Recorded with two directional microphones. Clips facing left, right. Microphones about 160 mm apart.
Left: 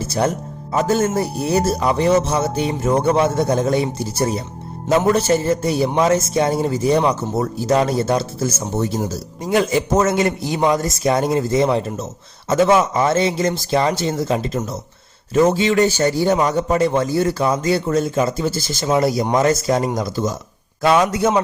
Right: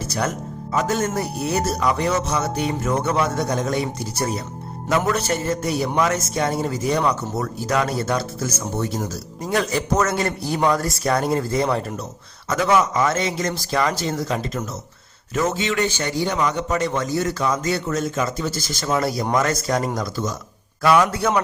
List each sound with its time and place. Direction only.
0.0 s a man's voice: 30° left (ahead or behind)